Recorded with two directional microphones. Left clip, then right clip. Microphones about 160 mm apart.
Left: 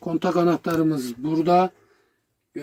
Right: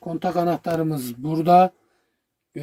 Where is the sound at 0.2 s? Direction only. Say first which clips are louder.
Left 1 dB; centre (ahead or behind).